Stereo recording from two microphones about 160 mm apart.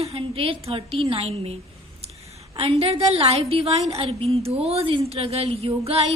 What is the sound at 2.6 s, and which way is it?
A woman's voice, 35° right (ahead or behind).